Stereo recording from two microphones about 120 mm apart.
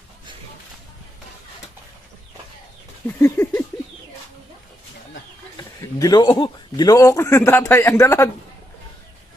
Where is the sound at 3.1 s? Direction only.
20° left (ahead or behind).